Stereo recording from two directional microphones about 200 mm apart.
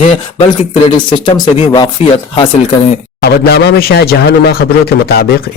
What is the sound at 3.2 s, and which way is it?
Speech, 55° left (ahead or behind).